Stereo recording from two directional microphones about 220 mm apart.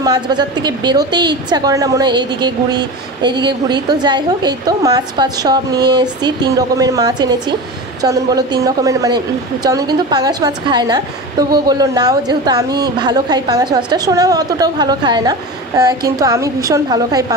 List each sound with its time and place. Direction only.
0.0 s a woman's voice: 20° right (ahead or behind)